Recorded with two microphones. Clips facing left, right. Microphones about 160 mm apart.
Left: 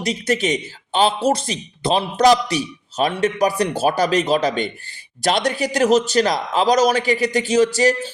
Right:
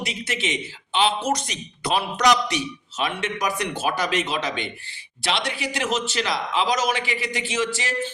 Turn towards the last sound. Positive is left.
turn(degrees=40)  # may be behind; listen again after turning